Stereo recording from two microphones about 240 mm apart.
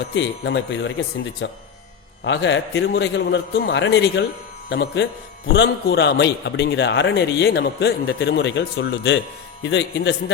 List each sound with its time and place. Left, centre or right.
0.1 s a man's voice: left